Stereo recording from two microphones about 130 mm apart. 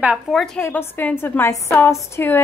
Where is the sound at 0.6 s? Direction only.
15° left (ahead or behind).